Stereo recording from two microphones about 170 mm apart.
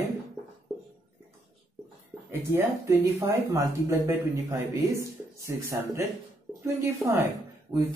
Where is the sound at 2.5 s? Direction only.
15° right (ahead or behind).